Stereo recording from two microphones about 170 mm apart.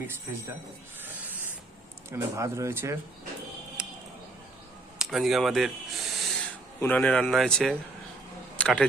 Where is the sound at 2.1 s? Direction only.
20° right (ahead or behind).